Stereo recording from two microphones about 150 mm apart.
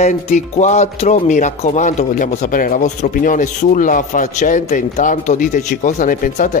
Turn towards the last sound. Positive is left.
turn(degrees=60)  # may be behind; listen again after turning